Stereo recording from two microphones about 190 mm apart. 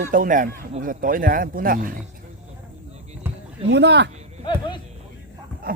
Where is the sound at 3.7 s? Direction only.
65° right (ahead or behind).